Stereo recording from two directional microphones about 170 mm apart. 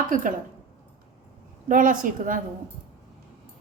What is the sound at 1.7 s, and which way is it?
Speech, 50° right (ahead or behind).